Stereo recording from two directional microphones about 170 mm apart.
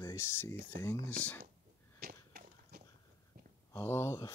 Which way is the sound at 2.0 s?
55° right (ahead or behind).